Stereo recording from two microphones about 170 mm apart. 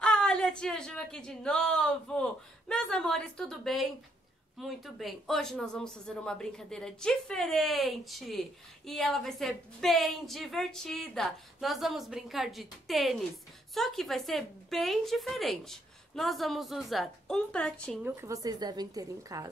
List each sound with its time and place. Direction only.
0.0 s speech: 5° left (ahead or behind)
18.0 s a woman's voice: 15° right (ahead or behind)